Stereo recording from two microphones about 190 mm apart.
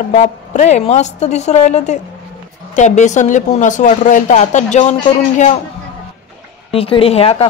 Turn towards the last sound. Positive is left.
turn(degrees=30)  # may be behind; listen again after turning